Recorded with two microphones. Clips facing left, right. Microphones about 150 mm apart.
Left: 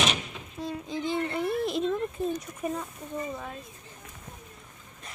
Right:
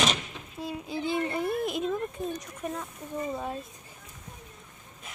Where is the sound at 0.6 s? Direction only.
10° right (ahead or behind).